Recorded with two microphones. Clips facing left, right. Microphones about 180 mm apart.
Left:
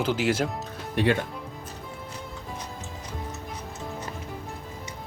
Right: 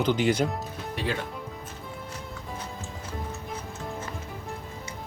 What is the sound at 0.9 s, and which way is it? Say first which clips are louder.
Speech: left 8 dB; 60° left (ahead or behind).